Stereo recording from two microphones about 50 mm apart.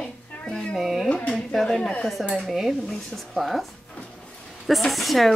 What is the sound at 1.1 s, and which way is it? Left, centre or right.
Speech, left.